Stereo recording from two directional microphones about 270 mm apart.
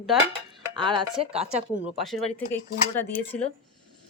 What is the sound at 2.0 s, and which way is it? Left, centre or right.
Speech, centre.